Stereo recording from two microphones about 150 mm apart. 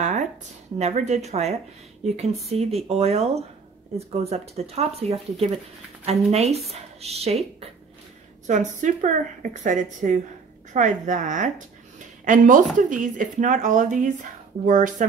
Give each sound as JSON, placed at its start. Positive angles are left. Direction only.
{"t": 0.7, "sound": "speech", "side_deg": -50}
{"t": 8.5, "sound": "speech", "side_deg": -55}